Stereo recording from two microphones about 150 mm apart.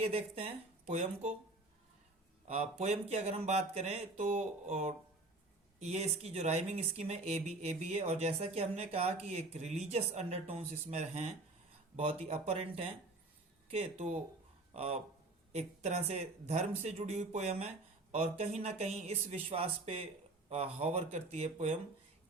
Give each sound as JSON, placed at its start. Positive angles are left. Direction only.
{"t": 0.0, "sound": "speech", "side_deg": -40}
{"t": 2.5, "sound": "speech", "side_deg": -45}